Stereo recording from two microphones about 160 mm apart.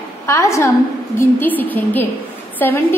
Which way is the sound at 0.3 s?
20° left (ahead or behind).